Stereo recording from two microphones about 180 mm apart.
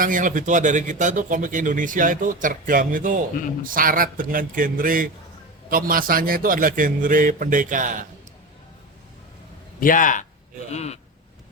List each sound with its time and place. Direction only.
0.0 s a man's voice: 50° right (ahead or behind)
9.8 s speech: 50° left (ahead or behind)